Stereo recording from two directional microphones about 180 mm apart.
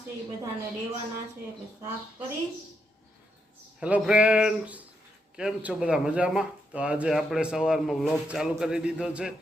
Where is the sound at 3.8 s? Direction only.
5° right (ahead or behind).